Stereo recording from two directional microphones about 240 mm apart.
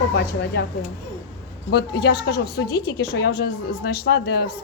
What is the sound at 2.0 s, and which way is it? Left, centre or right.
A woman's voice, left.